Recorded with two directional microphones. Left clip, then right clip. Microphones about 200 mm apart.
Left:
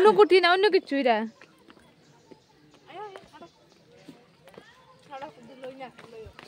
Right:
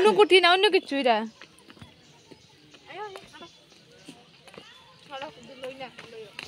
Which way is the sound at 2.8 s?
30° right (ahead or behind).